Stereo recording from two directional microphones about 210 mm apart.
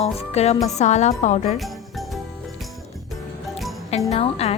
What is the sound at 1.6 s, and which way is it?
Music, centre (ahead or behind).